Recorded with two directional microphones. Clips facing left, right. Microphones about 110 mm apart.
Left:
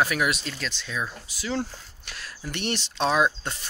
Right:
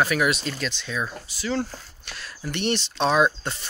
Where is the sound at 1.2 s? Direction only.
10° left (ahead or behind).